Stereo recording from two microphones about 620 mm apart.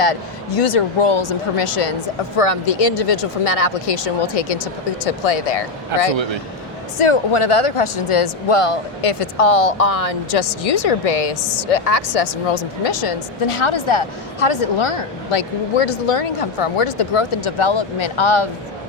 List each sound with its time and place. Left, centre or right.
0.0 s speech: left
7.0 s speech: left